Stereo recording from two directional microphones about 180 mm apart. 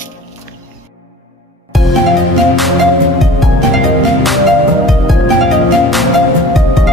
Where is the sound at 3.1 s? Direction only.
Centre (ahead or behind).